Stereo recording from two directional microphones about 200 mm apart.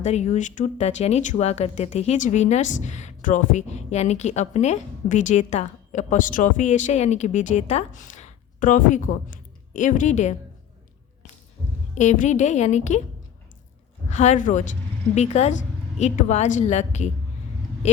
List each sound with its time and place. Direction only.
0.0 s speech: 35° left (ahead or behind)
11.9 s speech: 40° left (ahead or behind)
14.1 s speech: 35° left (ahead or behind)